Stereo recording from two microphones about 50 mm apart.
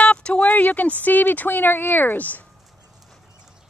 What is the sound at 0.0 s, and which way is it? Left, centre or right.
Speech, left.